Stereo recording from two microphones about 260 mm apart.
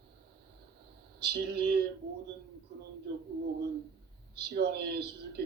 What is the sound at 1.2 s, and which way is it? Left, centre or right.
Speech, right.